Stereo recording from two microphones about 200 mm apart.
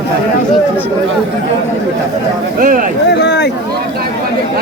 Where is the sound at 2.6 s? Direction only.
45° right (ahead or behind).